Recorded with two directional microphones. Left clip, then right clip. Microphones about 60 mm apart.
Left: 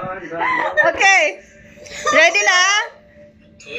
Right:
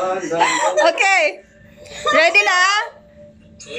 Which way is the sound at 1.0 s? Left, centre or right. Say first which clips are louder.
Left 2 dB; centre.